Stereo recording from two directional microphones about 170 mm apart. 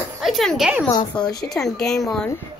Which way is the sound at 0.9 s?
25° left (ahead or behind).